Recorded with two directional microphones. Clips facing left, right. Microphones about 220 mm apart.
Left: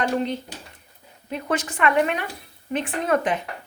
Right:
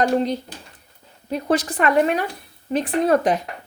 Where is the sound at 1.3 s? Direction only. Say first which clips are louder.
Right 5 dB; 35° right (ahead or behind).